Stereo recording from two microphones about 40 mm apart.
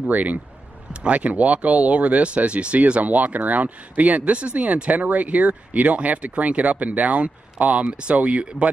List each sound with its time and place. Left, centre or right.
0.1 s speech: right